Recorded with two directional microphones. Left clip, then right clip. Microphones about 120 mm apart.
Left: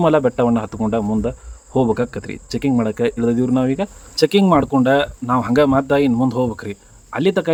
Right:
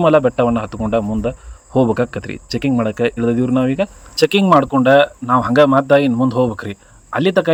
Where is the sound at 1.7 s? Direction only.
15° right (ahead or behind).